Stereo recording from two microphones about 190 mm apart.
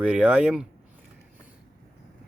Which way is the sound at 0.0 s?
5° right (ahead or behind).